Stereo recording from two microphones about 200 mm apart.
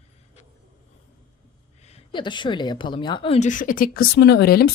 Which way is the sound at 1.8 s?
30° left (ahead or behind).